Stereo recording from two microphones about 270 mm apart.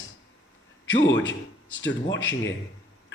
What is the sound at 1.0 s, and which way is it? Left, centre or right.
A man's voice, left.